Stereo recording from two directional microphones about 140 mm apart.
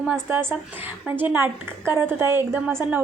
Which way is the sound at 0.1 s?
15° right (ahead or behind).